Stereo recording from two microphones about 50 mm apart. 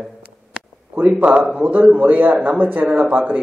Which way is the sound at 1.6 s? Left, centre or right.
Right.